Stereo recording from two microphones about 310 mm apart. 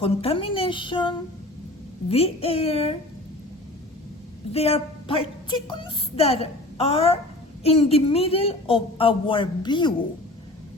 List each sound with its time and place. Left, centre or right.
0.0 s a woman's voice: centre
4.5 s a woman's voice: centre